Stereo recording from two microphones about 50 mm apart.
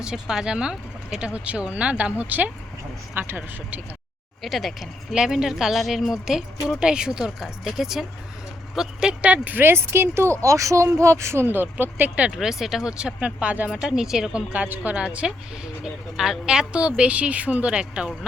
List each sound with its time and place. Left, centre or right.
0.0 s speech: centre; by 3.3 s right
4.4 s speech: centre
5.1 s speech: centre
9.2 s speech: right
9.6 s speech: right
11.4 s speech: right
12.3 s speech: centre
14.5 s speech: right
15.8 s speech: centre